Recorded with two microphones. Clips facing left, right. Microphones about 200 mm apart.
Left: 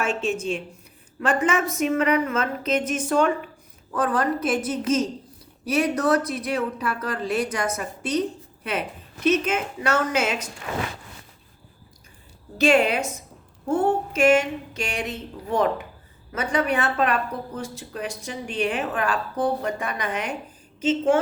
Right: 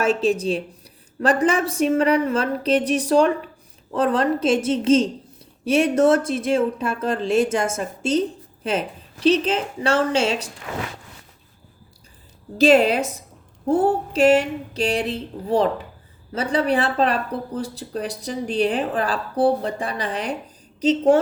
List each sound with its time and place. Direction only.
0.0 s speech: 35° right (ahead or behind)
9.2 s speech: 30° right (ahead or behind)
12.5 s speech: 35° right (ahead or behind)